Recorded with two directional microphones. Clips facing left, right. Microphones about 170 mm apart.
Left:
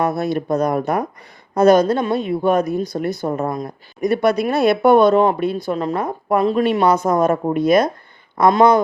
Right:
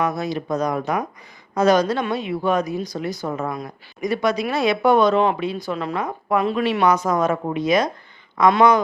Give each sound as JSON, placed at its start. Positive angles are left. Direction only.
{"t": 0.2, "sound": "speech", "side_deg": 55}
{"t": 3.2, "sound": "speech", "side_deg": 35}
{"t": 4.0, "sound": "speech", "side_deg": 55}
{"t": 8.4, "sound": "speech", "side_deg": 45}